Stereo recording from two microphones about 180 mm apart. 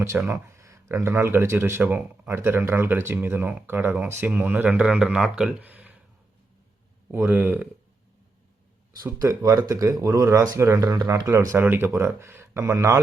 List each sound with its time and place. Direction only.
0.3 s speech: 15° right (ahead or behind)
7.1 s speech: 10° right (ahead or behind)
9.0 s speech: 20° right (ahead or behind)